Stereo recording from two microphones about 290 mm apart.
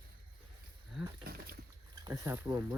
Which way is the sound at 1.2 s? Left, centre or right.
Right.